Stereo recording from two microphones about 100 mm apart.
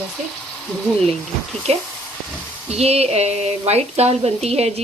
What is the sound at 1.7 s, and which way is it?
Speech, 90° right.